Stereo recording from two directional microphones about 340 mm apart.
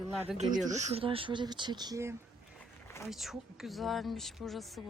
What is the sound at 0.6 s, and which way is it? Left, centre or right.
Speech, centre.